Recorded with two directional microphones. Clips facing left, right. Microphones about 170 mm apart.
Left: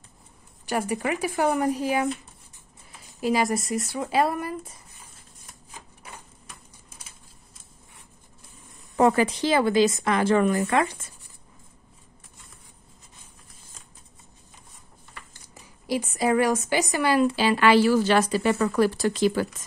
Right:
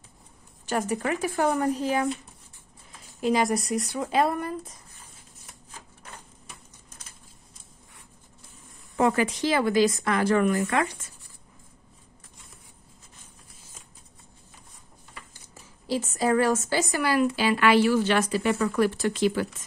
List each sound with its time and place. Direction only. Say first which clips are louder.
0.7 s speech: even; 10° left (ahead or behind)
3.2 s speech: even; 5° left (ahead or behind)
5.7 s typewriter: left 2 dB; 10° left (ahead or behind)
8.9 s a woman's voice: left 3 dB; 35° left (ahead or behind)
15.5 s a woman's voice: left 1 dB; 15° left (ahead or behind); by 19.4 s 40° left (ahead or behind)